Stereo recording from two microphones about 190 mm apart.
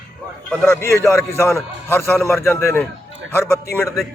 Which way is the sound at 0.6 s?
10° left (ahead or behind).